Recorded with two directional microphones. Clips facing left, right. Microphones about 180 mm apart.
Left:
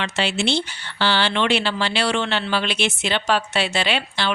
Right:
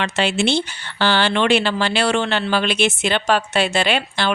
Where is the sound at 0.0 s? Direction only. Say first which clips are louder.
Right 4 dB; 50° right (ahead or behind).